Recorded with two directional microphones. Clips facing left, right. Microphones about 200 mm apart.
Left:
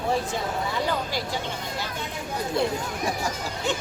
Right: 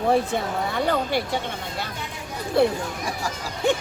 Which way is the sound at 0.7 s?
60° right (ahead or behind).